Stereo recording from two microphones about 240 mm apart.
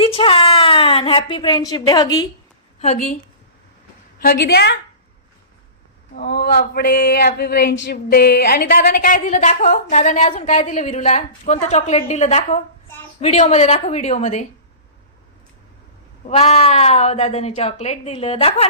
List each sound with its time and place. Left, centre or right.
0.0 s a woman's voice: left
2.8 s speech: left
4.2 s a woman's voice: left
6.1 s a woman's voice: left
16.3 s speech: left